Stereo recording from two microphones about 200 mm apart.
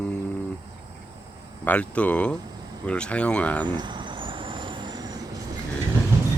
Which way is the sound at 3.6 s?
20° right (ahead or behind).